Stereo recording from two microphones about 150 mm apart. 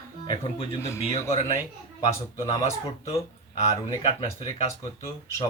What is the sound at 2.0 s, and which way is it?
Speech, 25° left (ahead or behind).